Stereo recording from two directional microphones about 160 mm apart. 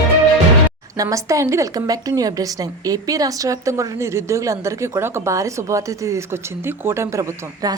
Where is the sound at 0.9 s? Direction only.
20° right (ahead or behind).